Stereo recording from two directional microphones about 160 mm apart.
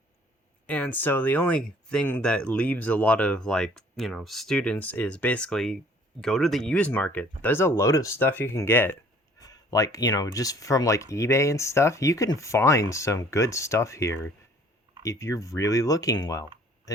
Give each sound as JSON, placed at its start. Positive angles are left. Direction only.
{"t": 0.7, "sound": "speech", "side_deg": 10}